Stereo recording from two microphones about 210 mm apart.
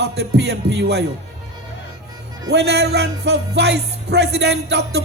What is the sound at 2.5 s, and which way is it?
Music, 50° right (ahead or behind).